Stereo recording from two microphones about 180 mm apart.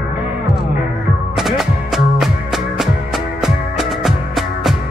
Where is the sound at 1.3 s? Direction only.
Centre (ahead or behind).